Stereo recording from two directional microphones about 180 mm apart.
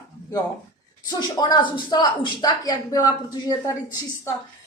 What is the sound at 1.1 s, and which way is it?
Speech, 20° left (ahead or behind).